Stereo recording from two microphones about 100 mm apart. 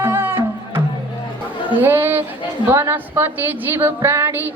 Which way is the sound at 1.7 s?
20° right (ahead or behind).